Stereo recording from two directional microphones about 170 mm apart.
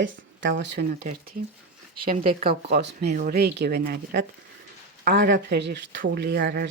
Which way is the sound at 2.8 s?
85° right.